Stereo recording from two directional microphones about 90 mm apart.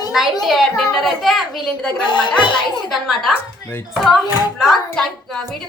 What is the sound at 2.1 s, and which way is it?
Speech, 60° left (ahead or behind).